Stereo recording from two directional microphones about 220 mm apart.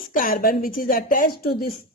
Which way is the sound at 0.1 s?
40° left (ahead or behind).